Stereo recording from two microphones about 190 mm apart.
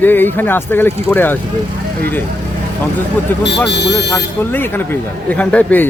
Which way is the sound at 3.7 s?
65° left (ahead or behind).